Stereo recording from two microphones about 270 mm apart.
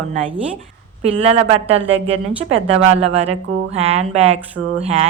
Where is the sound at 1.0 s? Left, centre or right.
Right.